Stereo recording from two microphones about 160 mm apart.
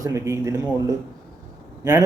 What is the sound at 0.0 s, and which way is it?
Speech, 20° right (ahead or behind).